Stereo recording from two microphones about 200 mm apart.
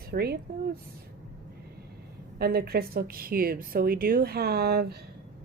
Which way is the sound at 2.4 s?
50° right (ahead or behind).